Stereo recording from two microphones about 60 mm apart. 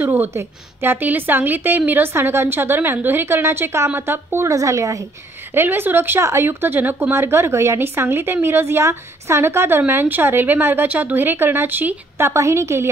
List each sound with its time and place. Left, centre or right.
0.1 s a woman's voice: right
4.5 s a woman's voice: right
5.5 s a woman's voice: right
6.2 s a woman's voice: right
12.2 s a woman's voice: right